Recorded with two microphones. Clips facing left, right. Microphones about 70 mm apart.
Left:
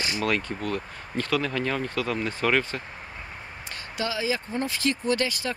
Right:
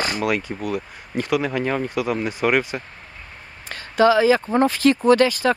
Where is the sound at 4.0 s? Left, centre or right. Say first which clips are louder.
Right 13 dB; right.